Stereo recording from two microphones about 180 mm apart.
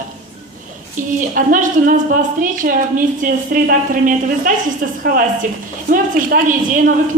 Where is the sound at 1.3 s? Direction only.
50° right (ahead or behind).